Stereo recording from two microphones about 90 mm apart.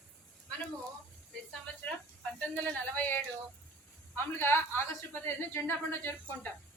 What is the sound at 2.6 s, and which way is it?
A woman's voice, 15° left (ahead or behind).